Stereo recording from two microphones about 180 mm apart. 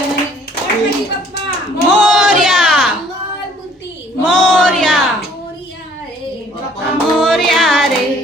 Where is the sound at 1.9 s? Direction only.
Centre (ahead or behind).